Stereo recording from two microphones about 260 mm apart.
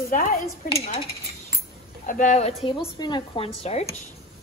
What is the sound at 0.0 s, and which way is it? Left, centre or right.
Speech, left.